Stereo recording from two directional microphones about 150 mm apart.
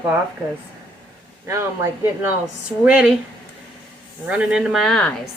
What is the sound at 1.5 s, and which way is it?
Speech, 20° right (ahead or behind).